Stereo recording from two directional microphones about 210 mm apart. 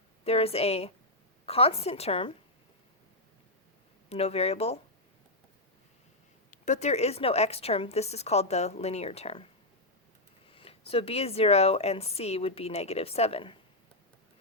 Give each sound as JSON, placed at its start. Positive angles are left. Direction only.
{"t": 0.3, "sound": "speech", "side_deg": 30}
{"t": 4.1, "sound": "speech", "side_deg": 30}
{"t": 6.5, "sound": "a woman's voice", "side_deg": 35}
{"t": 10.5, "sound": "speech", "side_deg": 25}